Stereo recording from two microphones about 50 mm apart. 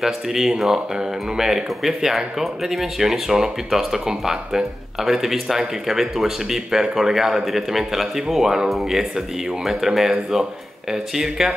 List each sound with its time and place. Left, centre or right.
0.0 s speech: centre